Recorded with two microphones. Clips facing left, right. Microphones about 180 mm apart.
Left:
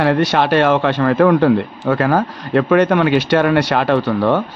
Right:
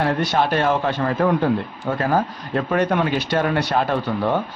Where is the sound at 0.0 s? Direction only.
80° left.